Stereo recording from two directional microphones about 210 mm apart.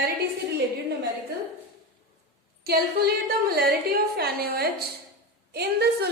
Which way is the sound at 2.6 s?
45° right (ahead or behind).